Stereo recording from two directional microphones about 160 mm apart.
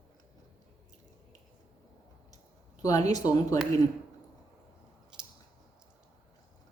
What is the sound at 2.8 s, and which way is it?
Speech, 20° left (ahead or behind).